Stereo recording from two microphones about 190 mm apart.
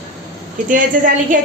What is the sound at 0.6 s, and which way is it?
Speech, 45° right (ahead or behind).